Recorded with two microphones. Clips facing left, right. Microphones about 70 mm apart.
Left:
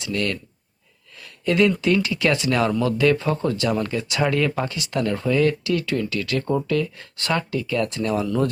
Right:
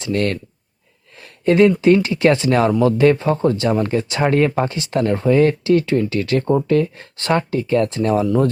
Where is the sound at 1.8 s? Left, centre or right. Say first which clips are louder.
Right 7 dB; right.